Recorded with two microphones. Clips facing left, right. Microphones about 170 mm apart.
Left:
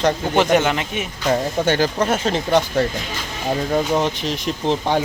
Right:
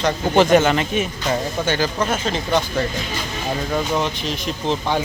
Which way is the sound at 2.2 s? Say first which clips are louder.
Left 3 dB; 65° left (ahead or behind).